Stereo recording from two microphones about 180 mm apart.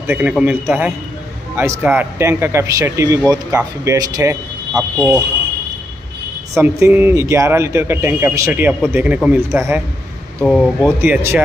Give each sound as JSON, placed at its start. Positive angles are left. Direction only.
{"t": 0.0, "sound": "speech", "side_deg": -10}
{"t": 4.7, "sound": "speech", "side_deg": -5}
{"t": 6.6, "sound": "speech", "side_deg": -10}
{"t": 10.4, "sound": "speech", "side_deg": 5}
{"t": 11.0, "sound": "speech", "side_deg": -10}